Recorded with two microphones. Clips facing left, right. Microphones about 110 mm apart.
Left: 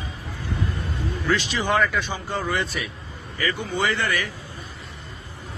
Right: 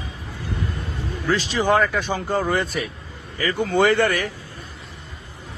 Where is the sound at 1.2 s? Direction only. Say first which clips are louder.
Right 4 dB; 40° right (ahead or behind).